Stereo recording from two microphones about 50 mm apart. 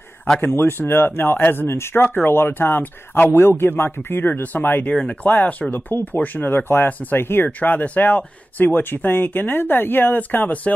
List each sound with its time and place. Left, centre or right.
0.4 s speech: left
4.3 s speech: left
7.4 s speech: left